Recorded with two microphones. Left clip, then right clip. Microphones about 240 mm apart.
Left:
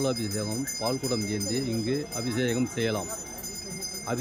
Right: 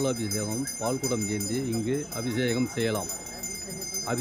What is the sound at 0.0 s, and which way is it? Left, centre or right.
Speech, centre.